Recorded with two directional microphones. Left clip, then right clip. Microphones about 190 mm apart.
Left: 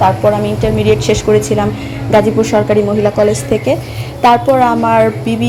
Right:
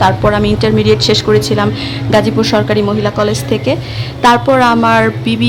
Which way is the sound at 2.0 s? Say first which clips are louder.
Left 1 dB; 5° right (ahead or behind).